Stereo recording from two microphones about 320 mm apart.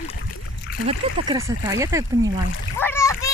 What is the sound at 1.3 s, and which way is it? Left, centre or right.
Speech, centre.